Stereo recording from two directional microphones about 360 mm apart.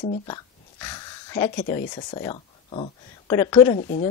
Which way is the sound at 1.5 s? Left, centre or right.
Left.